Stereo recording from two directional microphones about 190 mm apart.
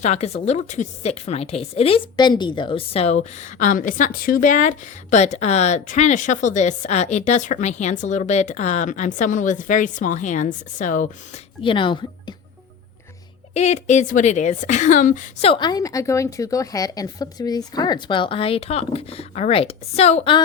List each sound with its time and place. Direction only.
0.0 s a woman's voice: 35° left (ahead or behind)
3.6 s a woman's voice: 45° left (ahead or behind)
11.6 s speech: 25° left (ahead or behind)
13.5 s a woman's voice: 35° left (ahead or behind)